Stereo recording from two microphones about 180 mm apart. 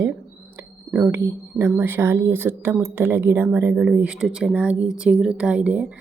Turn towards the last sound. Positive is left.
turn(degrees=-5)  # may be behind; listen again after turning